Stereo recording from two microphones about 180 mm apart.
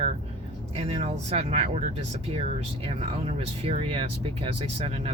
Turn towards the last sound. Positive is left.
turn(degrees=-30)  # may be behind; listen again after turning